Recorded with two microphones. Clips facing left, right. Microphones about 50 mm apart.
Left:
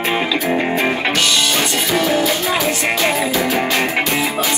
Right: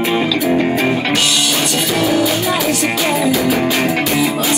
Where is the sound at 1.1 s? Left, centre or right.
Centre.